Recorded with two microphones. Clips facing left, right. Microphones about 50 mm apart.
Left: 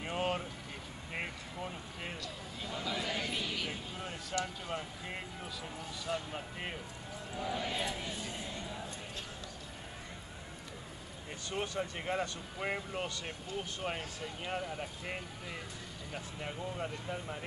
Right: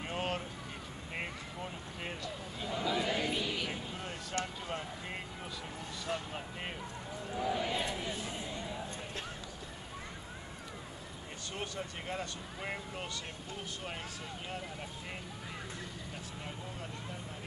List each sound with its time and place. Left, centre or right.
0.0 s vehicle: centre
1.1 s a sound: centre
2.6 s chatter: centre
3.6 s vehicle: centre
6.1 s speech: right
7.3 s speech: centre
11.5 s speech: centre
14.5 s speech: left
16.4 s speech: left